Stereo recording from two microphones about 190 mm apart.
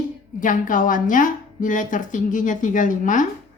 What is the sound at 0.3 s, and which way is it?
A woman's voice, 45° left (ahead or behind).